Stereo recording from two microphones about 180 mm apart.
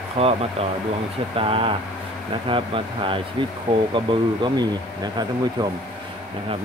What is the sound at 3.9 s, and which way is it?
Speech, 25° right (ahead or behind).